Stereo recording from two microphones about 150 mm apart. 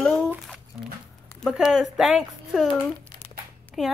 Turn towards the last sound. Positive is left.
turn(degrees=0)  # may be behind; listen again after turning